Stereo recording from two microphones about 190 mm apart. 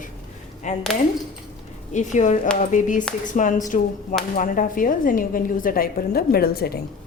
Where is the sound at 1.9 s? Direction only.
40° left (ahead or behind).